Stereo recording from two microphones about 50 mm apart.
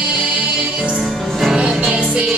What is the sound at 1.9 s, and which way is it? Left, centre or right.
Music, right.